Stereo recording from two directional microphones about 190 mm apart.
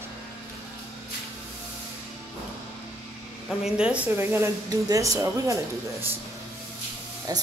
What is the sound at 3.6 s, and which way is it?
Speech, 5° right (ahead or behind).